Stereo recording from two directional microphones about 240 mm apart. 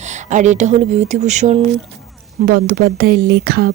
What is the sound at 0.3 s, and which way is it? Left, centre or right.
Speech, right.